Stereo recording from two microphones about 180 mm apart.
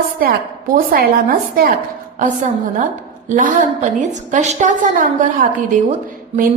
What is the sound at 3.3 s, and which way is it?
A woman's voice, 45° right (ahead or behind).